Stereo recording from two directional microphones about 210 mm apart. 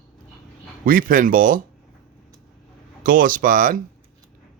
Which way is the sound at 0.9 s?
40° right (ahead or behind).